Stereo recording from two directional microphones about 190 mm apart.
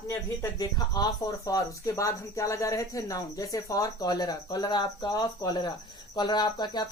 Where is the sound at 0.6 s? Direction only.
20° left (ahead or behind).